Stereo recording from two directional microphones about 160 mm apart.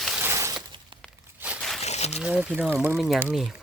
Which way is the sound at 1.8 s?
45° left (ahead or behind).